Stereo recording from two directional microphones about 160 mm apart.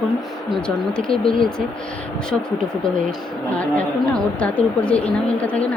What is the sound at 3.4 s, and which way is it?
Speech, 10° left (ahead or behind).